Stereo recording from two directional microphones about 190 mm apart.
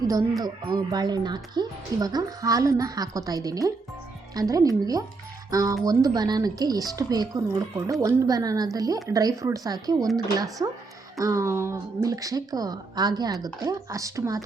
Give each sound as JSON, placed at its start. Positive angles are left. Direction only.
{"t": 0.1, "sound": "speech", "side_deg": -20}